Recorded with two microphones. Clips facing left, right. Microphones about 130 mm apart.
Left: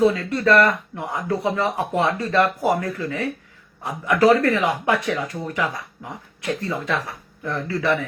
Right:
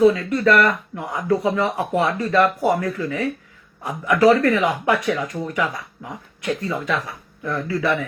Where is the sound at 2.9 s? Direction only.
25° right (ahead or behind).